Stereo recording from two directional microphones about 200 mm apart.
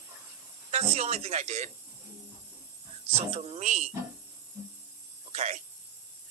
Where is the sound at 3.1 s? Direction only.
30° right (ahead or behind).